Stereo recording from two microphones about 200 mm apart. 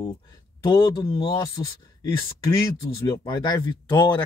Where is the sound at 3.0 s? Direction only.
20° left (ahead or behind).